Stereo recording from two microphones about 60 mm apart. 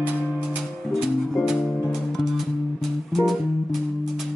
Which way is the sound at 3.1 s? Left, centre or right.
Centre.